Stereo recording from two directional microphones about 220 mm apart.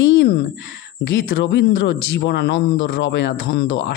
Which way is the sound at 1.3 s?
55° left (ahead or behind).